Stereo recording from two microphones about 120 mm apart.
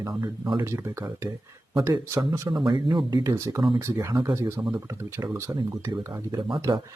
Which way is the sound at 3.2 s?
25° right (ahead or behind).